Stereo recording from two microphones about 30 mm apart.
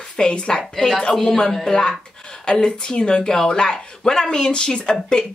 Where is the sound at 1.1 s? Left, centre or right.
Centre.